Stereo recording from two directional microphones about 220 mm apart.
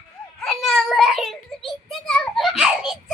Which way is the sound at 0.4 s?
Centre (ahead or behind).